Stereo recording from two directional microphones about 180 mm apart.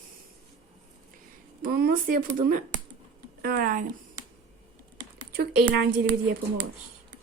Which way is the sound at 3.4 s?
55° right (ahead or behind).